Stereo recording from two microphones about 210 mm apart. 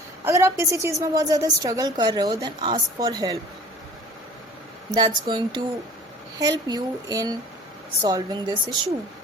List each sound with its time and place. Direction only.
0.3 s a woman's voice: 15° right (ahead or behind)
4.9 s speech: 20° right (ahead or behind)